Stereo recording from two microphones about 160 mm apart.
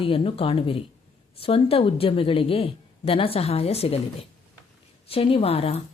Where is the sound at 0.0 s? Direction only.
35° left (ahead or behind).